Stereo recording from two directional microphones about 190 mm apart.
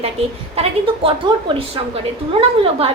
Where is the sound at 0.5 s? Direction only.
30° right (ahead or behind).